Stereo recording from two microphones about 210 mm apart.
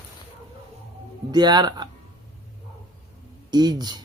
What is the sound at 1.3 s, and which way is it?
Speech, 20° right (ahead or behind).